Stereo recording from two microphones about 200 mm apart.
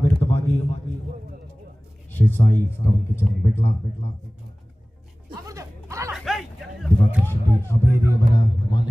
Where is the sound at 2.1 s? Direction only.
10° left (ahead or behind).